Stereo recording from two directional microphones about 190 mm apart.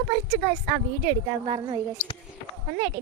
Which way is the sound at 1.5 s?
25° right (ahead or behind).